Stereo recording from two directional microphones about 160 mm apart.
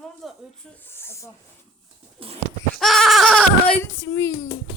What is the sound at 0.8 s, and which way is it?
Speech, 15° left (ahead or behind).